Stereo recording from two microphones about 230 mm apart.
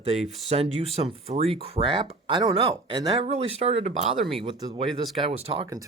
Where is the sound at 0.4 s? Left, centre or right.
Right.